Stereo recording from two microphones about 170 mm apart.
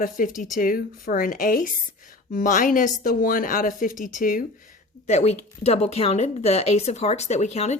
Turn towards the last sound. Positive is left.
turn(degrees=40)  # may be behind; listen again after turning